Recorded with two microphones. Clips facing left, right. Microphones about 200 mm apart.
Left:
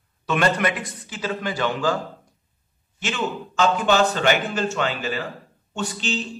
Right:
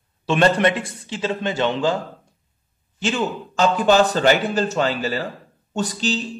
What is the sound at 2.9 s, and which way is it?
A man's voice, 35° right (ahead or behind).